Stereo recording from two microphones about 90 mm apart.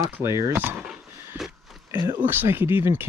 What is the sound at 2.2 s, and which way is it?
Speech, 25° right (ahead or behind).